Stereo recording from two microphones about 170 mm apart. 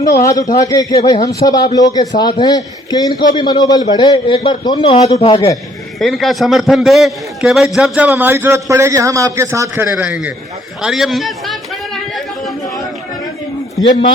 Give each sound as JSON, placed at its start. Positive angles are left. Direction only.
{"t": 0.0, "sound": "a man's voice", "side_deg": 20}
{"t": 6.0, "sound": "a man's voice", "side_deg": 0}
{"t": 10.0, "sound": "a man's voice", "side_deg": -5}